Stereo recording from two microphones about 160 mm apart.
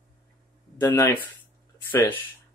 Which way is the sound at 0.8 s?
15° left (ahead or behind).